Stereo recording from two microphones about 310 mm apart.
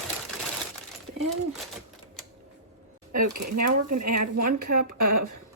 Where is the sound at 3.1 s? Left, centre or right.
Right.